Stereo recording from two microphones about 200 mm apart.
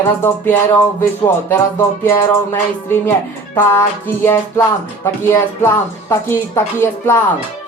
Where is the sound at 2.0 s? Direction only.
10° left (ahead or behind).